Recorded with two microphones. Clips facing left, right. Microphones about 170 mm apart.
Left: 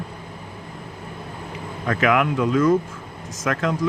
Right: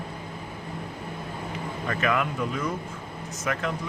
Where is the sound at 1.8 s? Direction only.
90° left.